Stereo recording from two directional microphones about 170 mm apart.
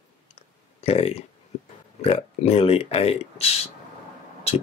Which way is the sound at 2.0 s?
40° left (ahead or behind).